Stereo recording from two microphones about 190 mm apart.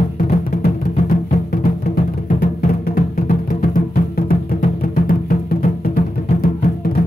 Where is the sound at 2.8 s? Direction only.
50° left (ahead or behind).